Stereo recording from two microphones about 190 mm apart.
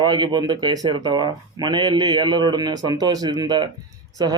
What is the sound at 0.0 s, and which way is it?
Speech, 25° right (ahead or behind).